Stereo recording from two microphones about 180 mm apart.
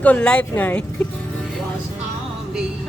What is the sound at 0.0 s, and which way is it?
Speech, 10° left (ahead or behind).